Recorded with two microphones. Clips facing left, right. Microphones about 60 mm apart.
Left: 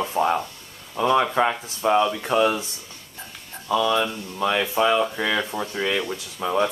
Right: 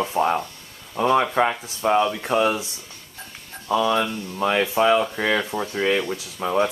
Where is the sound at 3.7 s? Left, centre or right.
Right.